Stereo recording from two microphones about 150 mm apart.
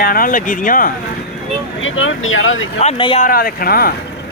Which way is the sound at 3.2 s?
75° left (ahead or behind).